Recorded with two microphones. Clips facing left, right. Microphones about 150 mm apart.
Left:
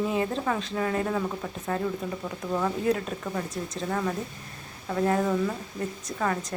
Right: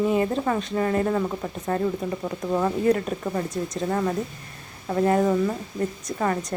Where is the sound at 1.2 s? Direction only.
15° right (ahead or behind).